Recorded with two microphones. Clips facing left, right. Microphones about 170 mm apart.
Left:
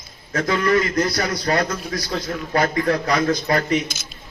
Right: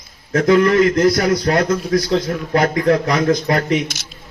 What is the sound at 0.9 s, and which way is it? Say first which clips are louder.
A man's voice: right 7 dB; 55° right (ahead or behind).